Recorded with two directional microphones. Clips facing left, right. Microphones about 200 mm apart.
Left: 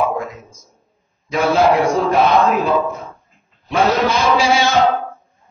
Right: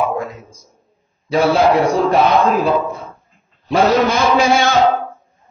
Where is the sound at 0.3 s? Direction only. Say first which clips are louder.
Right 1 dB; 30° right (ahead or behind).